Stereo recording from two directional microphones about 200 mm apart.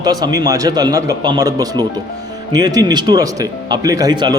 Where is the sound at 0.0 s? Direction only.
20° right (ahead or behind).